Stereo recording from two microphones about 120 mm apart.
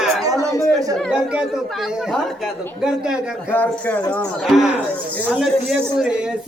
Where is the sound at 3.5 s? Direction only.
15° left (ahead or behind).